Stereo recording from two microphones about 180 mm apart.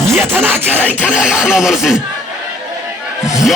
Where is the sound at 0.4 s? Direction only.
10° right (ahead or behind).